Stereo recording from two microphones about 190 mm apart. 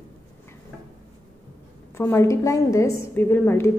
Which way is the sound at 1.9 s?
15° left (ahead or behind).